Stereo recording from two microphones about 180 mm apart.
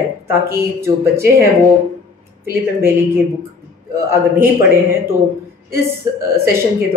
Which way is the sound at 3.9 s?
15° right (ahead or behind).